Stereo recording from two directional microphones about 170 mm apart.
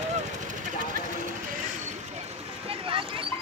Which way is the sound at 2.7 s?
30° right (ahead or behind).